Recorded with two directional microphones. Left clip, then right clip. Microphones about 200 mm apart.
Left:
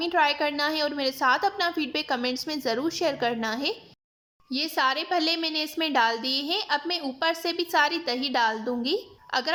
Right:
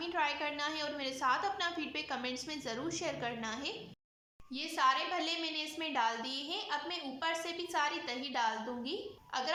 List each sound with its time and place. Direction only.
0.0 s a woman's voice: 40° left (ahead or behind)